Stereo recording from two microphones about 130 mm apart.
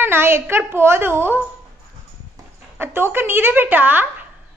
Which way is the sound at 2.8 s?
15° right (ahead or behind).